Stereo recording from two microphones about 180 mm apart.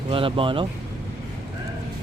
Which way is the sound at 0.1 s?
30° right (ahead or behind).